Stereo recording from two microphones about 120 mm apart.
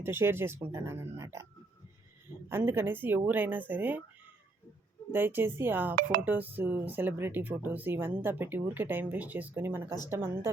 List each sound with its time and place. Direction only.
0.0 s speech: 20° right (ahead or behind)
2.5 s speech: 20° right (ahead or behind)
5.1 s speech: 15° right (ahead or behind)